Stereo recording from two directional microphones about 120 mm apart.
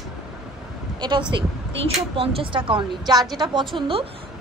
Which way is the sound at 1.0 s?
40° right (ahead or behind).